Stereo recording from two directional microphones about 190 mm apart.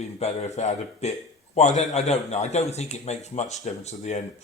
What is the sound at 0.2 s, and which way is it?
A man's voice, 35° left (ahead or behind).